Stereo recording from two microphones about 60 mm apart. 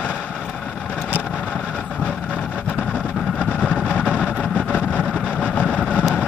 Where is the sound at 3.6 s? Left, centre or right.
Centre.